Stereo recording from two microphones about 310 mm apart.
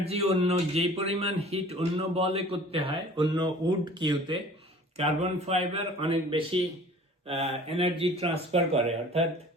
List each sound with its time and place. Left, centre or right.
0.0 s speech: centre